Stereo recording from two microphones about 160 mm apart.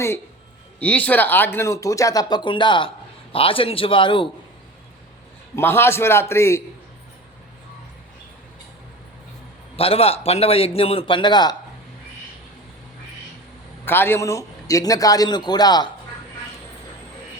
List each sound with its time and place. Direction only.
0.8 s a man's voice: 10° left (ahead or behind); by 4.3 s 30° left (ahead or behind)
5.5 s a man's voice: 15° left (ahead or behind)
9.7 s a man's voice: 35° left (ahead or behind)
13.8 s speech: 15° left (ahead or behind)